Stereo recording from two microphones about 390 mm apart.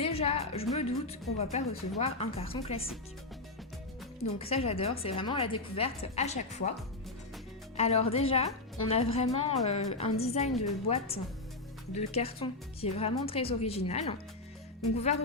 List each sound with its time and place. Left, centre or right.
0.0 s a woman's voice: centre
4.4 s a woman's voice: centre
7.8 s a woman's voice: centre